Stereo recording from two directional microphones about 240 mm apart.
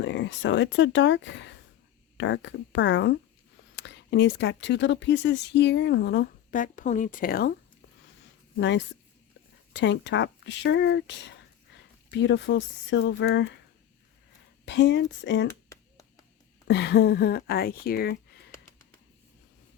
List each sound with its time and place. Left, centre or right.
0.0 s speech: left
9.7 s speech: left
12.1 s speech: left
14.6 s speech: left
15.7 s a sound: centre
16.6 s speech: left